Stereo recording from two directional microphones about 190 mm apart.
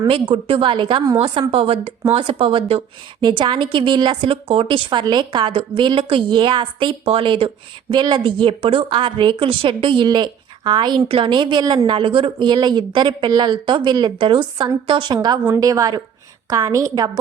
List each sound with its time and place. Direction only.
0.0 s a woman's voice: 30° right (ahead or behind)